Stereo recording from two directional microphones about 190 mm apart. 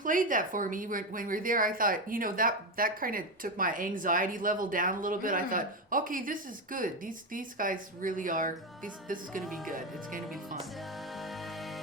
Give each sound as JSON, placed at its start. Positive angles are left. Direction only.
{"t": 0.0, "sound": "a woman's voice", "side_deg": -45}
{"t": 9.6, "sound": "a woman's voice", "side_deg": -45}